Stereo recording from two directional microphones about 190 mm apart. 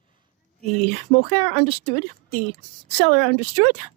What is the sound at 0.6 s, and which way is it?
Speech, 45° left (ahead or behind).